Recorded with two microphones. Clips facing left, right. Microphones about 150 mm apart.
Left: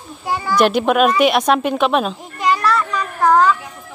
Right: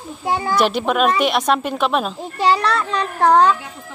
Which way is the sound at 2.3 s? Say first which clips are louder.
Even; 30° right (ahead or behind).